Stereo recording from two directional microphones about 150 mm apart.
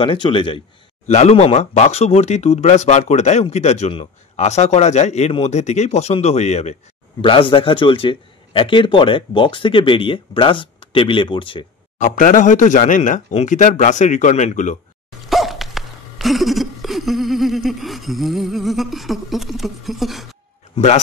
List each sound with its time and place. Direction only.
0.0 s speech: 35° left (ahead or behind)
1.0 s speech: 50° left (ahead or behind); by 11.6 s 35° left (ahead or behind)
12.0 s speech: 60° left (ahead or behind)
15.2 s dog: centre (ahead or behind)
20.7 s a man's voice: 45° left (ahead or behind)